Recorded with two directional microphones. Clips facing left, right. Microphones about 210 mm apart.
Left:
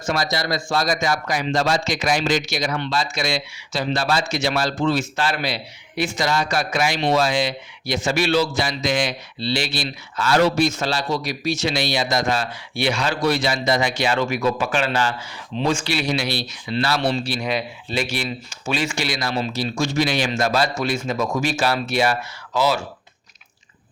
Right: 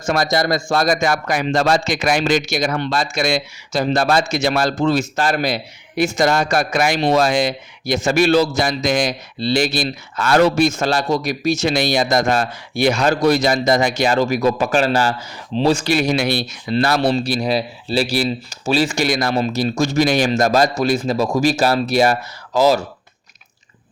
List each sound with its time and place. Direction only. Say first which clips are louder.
0.0 s speech: right 5 dB; 50° right (ahead or behind)